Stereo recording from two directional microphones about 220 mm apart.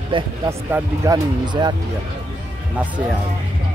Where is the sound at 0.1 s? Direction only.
10° right (ahead or behind).